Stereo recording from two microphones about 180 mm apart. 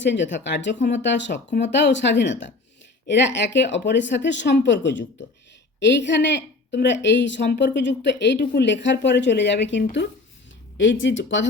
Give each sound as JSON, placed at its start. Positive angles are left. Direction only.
{"t": 0.0, "sound": "a woman's voice", "side_deg": 80}
{"t": 10.8, "sound": "speech", "side_deg": 90}